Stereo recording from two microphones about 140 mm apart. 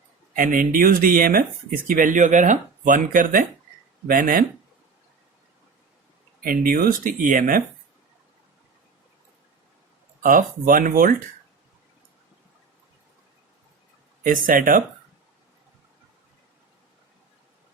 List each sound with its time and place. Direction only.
0.3 s speech: 75° right (ahead or behind)
6.4 s speech: 85° right
10.2 s speech: 75° right (ahead or behind)
14.3 s speech: 80° right